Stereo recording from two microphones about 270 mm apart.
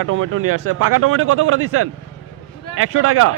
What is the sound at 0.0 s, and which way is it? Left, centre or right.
Speech, right.